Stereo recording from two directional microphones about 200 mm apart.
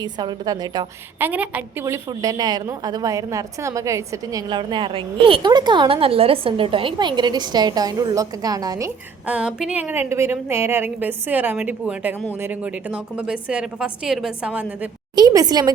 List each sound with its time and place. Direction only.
0.0 s a woman's voice: 20° right (ahead or behind)
1.3 s a woman's voice: 10° right (ahead or behind)
9.2 s a woman's voice: 5° right (ahead or behind)
15.1 s a woman's voice: 20° right (ahead or behind)